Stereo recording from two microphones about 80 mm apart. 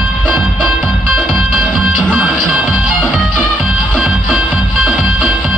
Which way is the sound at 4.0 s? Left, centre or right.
Centre.